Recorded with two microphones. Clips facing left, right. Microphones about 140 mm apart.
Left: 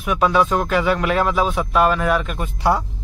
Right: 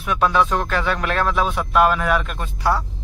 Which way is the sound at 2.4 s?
20° left (ahead or behind).